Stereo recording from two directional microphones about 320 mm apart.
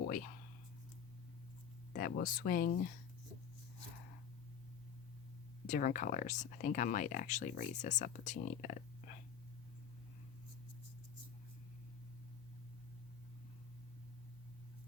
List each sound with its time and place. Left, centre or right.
1.9 s speech: left
5.6 s speech: left